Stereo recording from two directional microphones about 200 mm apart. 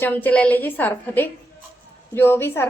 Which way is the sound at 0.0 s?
10° left (ahead or behind).